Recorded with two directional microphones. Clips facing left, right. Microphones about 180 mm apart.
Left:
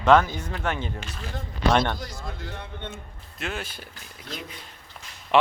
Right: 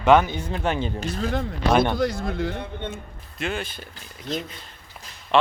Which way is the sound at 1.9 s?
60° right (ahead or behind).